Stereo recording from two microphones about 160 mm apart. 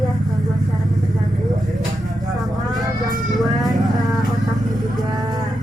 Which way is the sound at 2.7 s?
25° right (ahead or behind).